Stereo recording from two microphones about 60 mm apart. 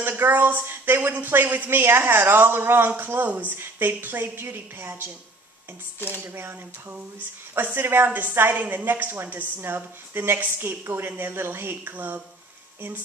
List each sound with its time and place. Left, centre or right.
0.2 s a woman's voice: right
6.2 s a woman's voice: right